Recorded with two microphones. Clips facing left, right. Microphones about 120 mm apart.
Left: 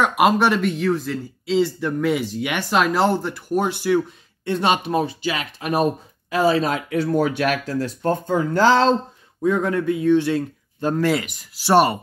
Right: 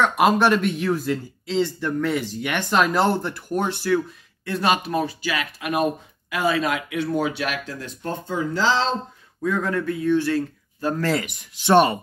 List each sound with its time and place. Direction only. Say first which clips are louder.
0.0 s speech: left 1 dB; 10° left (ahead or behind)
1.4 s speech: left 6 dB; 10° left (ahead or behind)
4.5 s speech: left 2 dB; 25° left (ahead or behind); by 8.9 s 50° left (ahead or behind)
9.4 s speech: left 4 dB; 20° left (ahead or behind)
11.2 s speech: right 1 dB; 5° left (ahead or behind)